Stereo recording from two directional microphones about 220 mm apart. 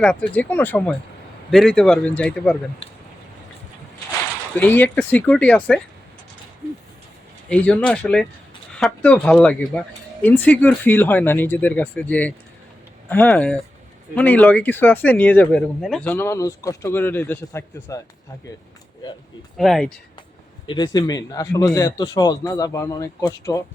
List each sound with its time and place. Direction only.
0.0 s speech: 5° left (ahead or behind)
2.8 s a sound: 25° left (ahead or behind)
4.5 s speech: 10° left (ahead or behind)
7.5 s speech: 5° left (ahead or behind)
19.5 s speech: centre (ahead or behind)
20.7 s speech: 20° left (ahead or behind)